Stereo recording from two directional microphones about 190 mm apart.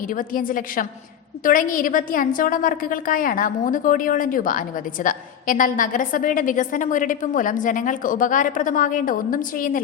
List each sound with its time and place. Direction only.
0.1 s a woman's voice: 45° left (ahead or behind)